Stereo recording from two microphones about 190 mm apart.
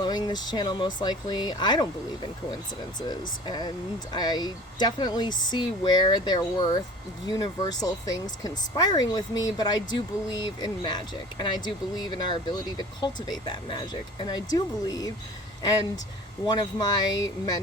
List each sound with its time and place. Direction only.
0.0 s speech: 20° left (ahead or behind)
16.5 s speech: 20° left (ahead or behind)